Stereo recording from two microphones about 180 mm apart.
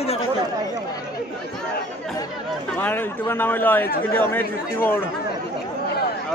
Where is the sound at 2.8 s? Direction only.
10° left (ahead or behind).